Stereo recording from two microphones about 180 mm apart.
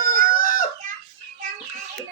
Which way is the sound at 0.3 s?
50° left (ahead or behind).